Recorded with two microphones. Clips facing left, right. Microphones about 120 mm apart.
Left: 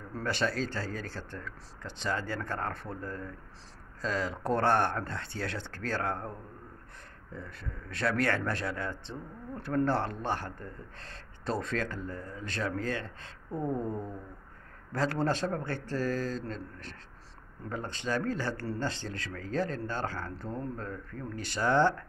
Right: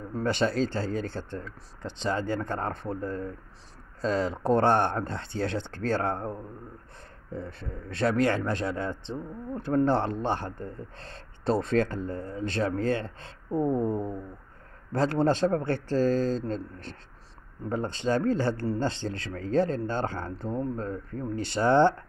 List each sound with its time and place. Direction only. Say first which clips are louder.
0.2 s speech: right 5 dB; 25° right (ahead or behind)
7.3 s speech: right 6 dB; 30° right (ahead or behind)